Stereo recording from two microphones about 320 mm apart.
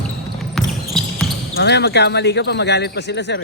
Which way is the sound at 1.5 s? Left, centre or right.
Left.